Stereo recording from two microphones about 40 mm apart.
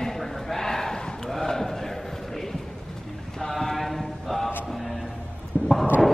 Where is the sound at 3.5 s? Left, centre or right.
Centre.